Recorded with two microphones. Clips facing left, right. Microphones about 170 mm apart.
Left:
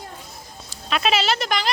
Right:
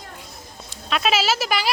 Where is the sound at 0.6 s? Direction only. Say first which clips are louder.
Even; centre (ahead or behind).